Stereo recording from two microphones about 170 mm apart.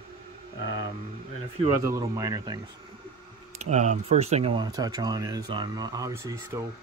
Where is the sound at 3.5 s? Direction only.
40° right (ahead or behind).